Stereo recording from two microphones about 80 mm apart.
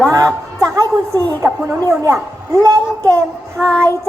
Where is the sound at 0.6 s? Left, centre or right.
Right.